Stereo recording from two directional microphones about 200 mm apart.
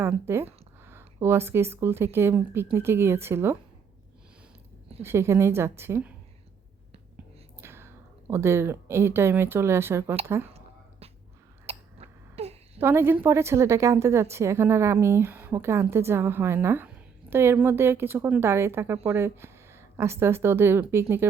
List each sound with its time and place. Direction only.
0.0 s a woman's voice: 10° right (ahead or behind)
5.0 s a woman's voice: 15° right (ahead or behind)
7.6 s speech: 10° right (ahead or behind)
11.6 s hiccup: 30° right (ahead or behind)
12.8 s a woman's voice: 10° right (ahead or behind)